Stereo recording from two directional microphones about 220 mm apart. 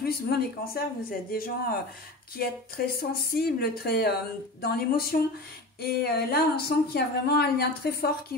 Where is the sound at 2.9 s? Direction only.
45° left (ahead or behind).